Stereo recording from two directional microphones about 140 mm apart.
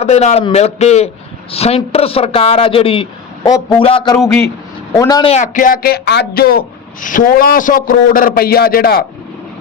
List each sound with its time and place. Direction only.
0.0 s a man's voice: 50° left (ahead or behind)
4.9 s speech: 25° left (ahead or behind)
5.4 s speech: 70° left (ahead or behind); by 9.0 s 90° left